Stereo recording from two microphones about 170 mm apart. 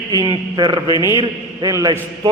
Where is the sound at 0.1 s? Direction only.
25° right (ahead or behind).